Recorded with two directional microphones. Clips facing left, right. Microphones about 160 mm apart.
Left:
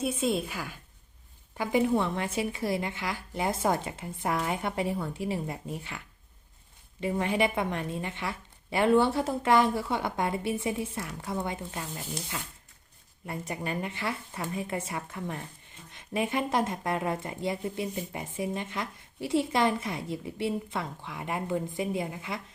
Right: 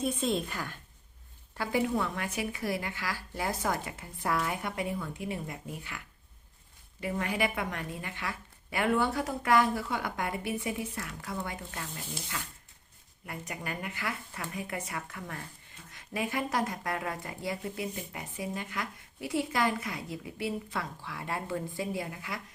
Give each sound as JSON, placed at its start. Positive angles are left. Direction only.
{"t": 0.0, "sound": "a woman's voice", "side_deg": 10}
{"t": 7.0, "sound": "speech", "side_deg": 25}